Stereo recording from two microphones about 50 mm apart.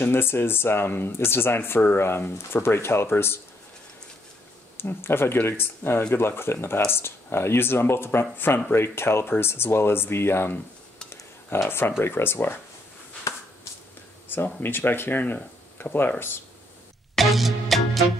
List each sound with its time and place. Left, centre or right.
0.0 s speech: left
4.7 s speech: left
14.3 s speech: left
17.1 s music: centre